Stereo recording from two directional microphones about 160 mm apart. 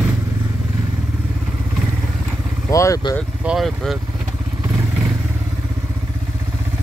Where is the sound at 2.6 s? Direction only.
20° left (ahead or behind).